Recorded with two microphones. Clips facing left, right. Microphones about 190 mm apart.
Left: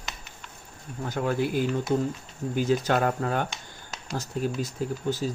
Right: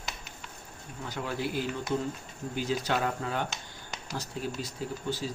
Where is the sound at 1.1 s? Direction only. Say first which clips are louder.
Left 7 dB; 50° left (ahead or behind).